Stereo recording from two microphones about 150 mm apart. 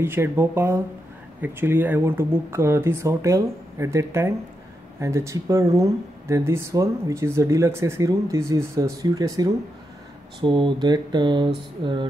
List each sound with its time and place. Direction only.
0.0 s speech: 15° right (ahead or behind); by 12.1 s 30° right (ahead or behind)